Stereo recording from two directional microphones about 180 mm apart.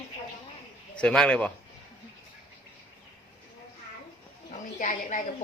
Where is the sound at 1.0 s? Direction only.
5° left (ahead or behind).